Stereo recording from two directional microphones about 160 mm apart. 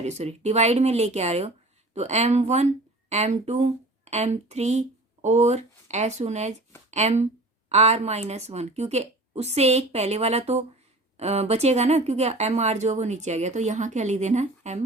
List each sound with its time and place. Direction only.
0.0 s speech: 45° right (ahead or behind)